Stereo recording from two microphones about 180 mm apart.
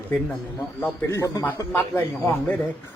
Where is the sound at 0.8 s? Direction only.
10° left (ahead or behind).